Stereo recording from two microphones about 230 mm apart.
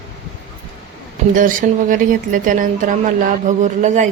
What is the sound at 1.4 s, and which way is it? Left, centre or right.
A woman's voice, right.